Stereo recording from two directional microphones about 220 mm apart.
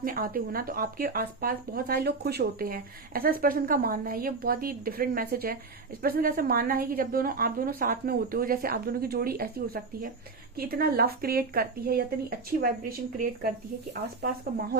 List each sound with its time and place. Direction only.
0.0 s speech: 40° right (ahead or behind)